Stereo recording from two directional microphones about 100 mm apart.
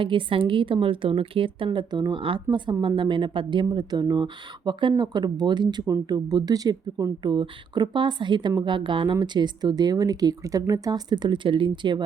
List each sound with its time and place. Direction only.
0.0 s a woman's voice: 60° right (ahead or behind)
5.8 s speech: 35° right (ahead or behind)